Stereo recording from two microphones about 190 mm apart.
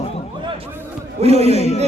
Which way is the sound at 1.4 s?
35° left (ahead or behind).